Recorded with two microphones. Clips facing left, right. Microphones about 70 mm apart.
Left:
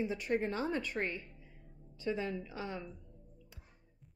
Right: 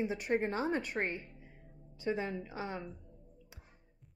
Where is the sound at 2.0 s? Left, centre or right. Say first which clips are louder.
Right 1 dB; right.